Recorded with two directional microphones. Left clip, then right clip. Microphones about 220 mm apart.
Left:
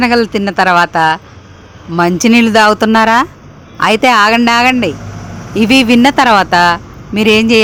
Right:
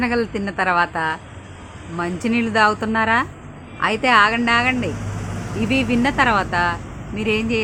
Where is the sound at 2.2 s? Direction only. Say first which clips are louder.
Left 8 dB; 45° left (ahead or behind).